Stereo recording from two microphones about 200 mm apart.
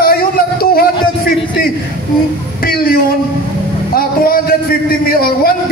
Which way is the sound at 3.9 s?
45° left (ahead or behind).